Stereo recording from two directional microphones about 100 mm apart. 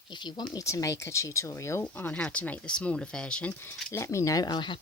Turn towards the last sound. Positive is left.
turn(degrees=45)  # may be behind; listen again after turning